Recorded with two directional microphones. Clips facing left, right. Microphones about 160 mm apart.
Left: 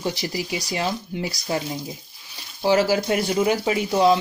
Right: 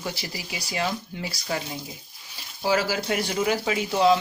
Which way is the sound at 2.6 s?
25° left (ahead or behind).